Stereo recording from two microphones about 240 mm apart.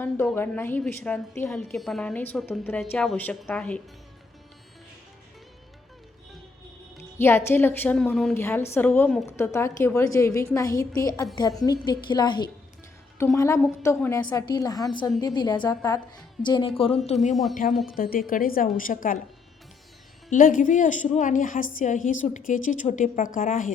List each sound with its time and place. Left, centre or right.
0.0 s a woman's voice: centre
7.2 s a woman's voice: centre
17.5 s a woman's voice: left
20.3 s a woman's voice: left